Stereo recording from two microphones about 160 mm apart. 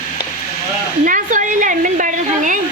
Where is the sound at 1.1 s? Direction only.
55° right (ahead or behind).